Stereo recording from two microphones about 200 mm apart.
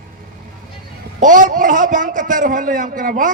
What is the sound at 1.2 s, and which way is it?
A man's voice, 40° right (ahead or behind).